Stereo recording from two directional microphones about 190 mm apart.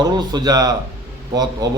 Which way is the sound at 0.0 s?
20° right (ahead or behind).